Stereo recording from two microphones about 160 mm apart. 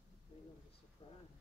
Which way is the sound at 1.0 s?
35° left (ahead or behind).